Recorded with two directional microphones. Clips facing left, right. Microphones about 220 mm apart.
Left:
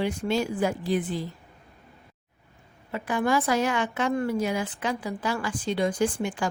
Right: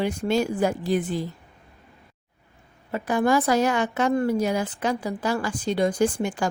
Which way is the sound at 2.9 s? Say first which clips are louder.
Right 4 dB; 40° right (ahead or behind).